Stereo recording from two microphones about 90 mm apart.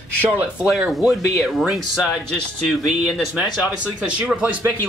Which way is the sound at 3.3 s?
10° right (ahead or behind).